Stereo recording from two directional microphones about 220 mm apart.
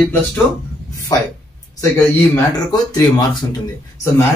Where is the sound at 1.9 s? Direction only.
15° left (ahead or behind).